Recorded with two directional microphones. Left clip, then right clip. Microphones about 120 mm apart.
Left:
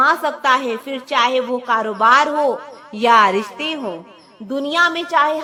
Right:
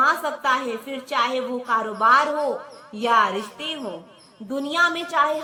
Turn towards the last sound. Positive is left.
turn(degrees=25)  # may be behind; listen again after turning